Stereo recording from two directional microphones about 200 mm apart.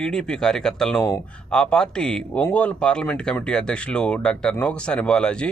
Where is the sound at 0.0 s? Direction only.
5° left (ahead or behind).